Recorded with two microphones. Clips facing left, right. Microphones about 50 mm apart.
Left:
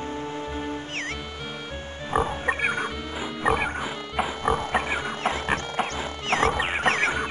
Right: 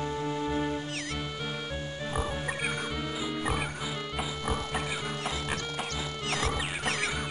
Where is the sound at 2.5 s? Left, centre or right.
Left.